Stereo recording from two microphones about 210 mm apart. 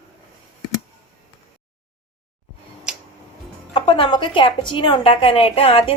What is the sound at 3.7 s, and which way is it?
A woman's voice, 25° left (ahead or behind).